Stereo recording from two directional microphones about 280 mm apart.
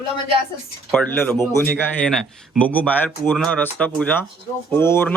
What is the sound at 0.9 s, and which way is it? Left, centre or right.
Speech, centre.